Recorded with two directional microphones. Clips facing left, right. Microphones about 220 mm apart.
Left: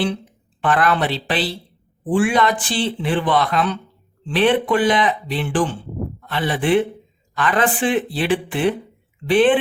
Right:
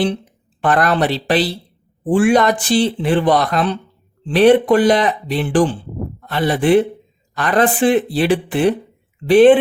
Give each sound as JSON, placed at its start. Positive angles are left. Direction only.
{"t": 0.6, "sound": "speech", "side_deg": -40}